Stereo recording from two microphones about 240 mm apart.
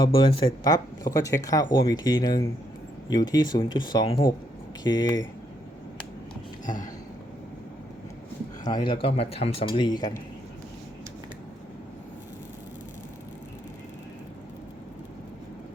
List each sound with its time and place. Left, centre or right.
0.0 s speech: left
8.6 s a man's voice: centre